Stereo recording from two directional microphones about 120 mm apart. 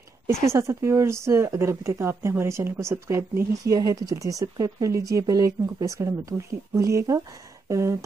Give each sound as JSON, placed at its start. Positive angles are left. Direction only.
{"t": 0.3, "sound": "speech", "side_deg": -25}